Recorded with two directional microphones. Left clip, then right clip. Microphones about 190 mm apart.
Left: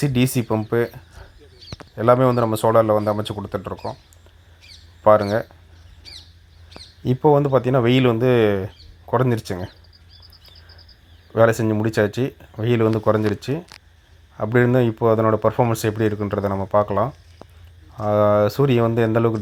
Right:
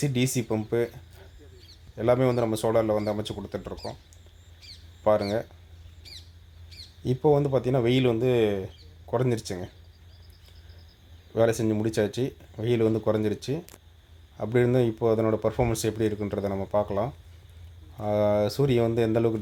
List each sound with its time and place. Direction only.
0.0 s speech: 15° left (ahead or behind)
5.0 s speech: 15° left (ahead or behind)
7.0 s speech: 15° left (ahead or behind)
11.3 s speech: 15° left (ahead or behind)